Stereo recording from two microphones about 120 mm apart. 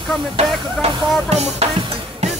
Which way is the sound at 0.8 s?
60° right (ahead or behind).